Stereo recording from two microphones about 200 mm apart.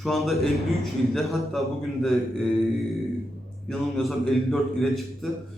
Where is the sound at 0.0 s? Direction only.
Centre (ahead or behind).